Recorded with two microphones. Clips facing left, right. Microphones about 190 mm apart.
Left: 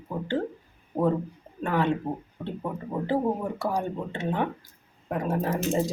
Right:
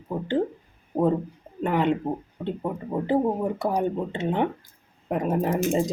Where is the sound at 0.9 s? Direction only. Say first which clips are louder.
Right 2 dB; 10° right (ahead or behind).